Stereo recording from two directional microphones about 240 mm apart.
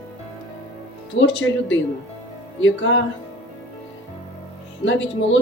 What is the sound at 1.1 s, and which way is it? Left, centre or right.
Speech, left.